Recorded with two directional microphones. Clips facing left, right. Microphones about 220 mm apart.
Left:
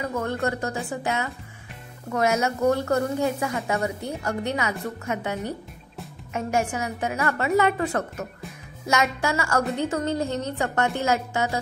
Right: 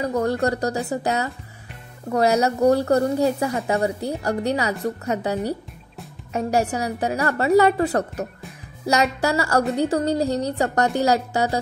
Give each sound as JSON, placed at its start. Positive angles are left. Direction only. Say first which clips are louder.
{"t": 0.0, "sound": "a woman's voice", "louder": "right 5 dB", "side_deg": -35}